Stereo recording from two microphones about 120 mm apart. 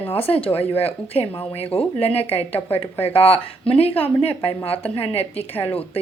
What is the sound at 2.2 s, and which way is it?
Speech, 15° left (ahead or behind).